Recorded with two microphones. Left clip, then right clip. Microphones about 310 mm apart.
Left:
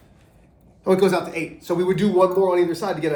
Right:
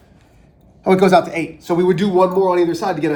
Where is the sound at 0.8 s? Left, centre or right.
Right.